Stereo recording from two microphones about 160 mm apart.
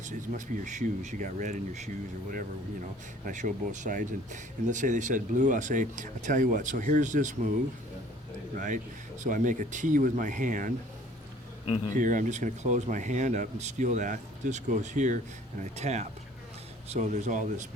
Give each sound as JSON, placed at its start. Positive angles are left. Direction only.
{"t": 0.0, "sound": "speech", "side_deg": -50}
{"t": 8.5, "sound": "speech", "side_deg": -55}
{"t": 11.9, "sound": "speech", "side_deg": -55}